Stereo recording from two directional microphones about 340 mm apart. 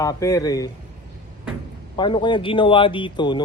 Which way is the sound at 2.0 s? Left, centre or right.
Centre.